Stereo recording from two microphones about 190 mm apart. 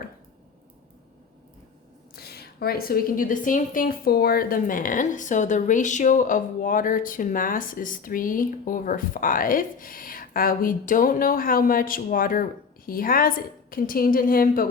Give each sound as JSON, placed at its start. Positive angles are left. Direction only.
{"t": 2.1, "sound": "a woman's voice", "side_deg": 55}